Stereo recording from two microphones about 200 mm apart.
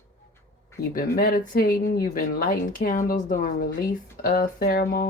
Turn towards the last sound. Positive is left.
turn(degrees=50)  # may be behind; listen again after turning